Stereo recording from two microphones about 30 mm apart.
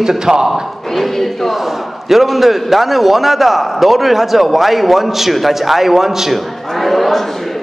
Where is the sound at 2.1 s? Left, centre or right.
Centre.